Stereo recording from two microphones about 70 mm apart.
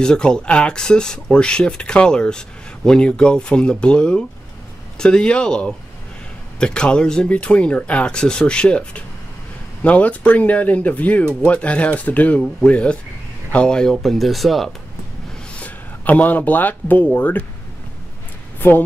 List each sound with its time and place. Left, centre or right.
0.0 s speech: centre
14.0 s speech: centre
15.5 s speech: left
18.6 s a woman's voice: left